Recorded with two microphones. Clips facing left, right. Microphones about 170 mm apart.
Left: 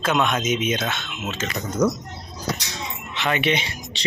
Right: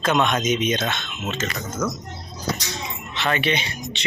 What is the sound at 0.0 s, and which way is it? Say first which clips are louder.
Speech: right 1 dB; 5° left (ahead or behind).